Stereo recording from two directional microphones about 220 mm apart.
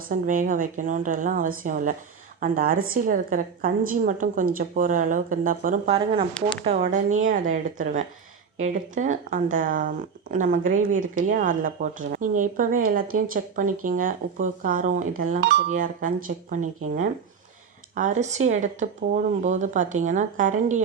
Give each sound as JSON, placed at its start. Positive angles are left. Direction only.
{"t": 0.1, "sound": "speech", "side_deg": -40}
{"t": 15.7, "sound": "speech", "side_deg": -35}
{"t": 17.9, "sound": "speech", "side_deg": -35}